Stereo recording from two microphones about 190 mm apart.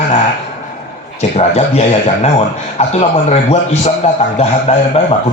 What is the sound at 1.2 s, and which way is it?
Speech, 35° left (ahead or behind).